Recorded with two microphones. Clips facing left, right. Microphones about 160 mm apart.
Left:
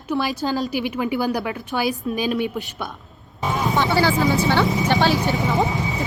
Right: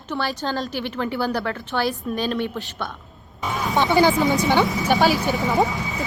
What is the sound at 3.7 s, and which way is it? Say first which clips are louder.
Speech: right 3 dB; 20° right (ahead or behind).